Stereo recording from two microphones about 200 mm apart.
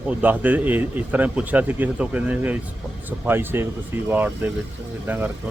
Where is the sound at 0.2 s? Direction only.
10° right (ahead or behind).